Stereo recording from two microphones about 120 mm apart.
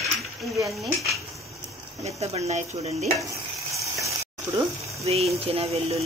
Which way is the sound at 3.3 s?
25° right (ahead or behind).